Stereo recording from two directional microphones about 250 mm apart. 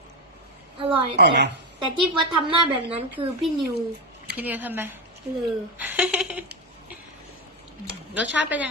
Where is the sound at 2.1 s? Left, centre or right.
Centre.